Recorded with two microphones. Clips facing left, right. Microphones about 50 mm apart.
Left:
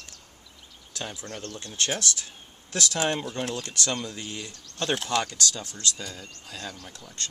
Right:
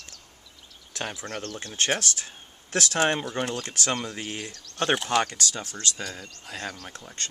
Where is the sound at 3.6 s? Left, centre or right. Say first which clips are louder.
Right 1 dB; right.